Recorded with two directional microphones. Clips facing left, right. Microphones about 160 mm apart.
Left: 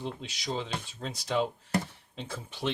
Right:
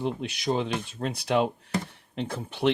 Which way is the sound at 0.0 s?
60° right (ahead or behind).